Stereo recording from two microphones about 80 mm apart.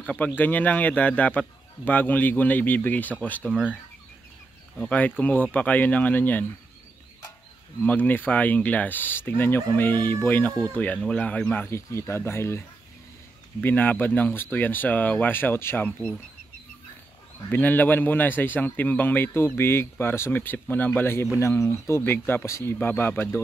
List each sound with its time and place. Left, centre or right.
0.0 s a man's voice: centre
4.7 s a man's voice: centre
7.8 s a man's voice: left
11.6 s speech: left
13.7 s a man's voice: left
17.5 s a man's voice: left